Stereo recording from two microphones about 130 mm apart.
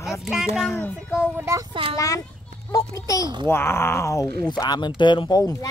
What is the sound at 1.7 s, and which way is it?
Speech, 45° right (ahead or behind).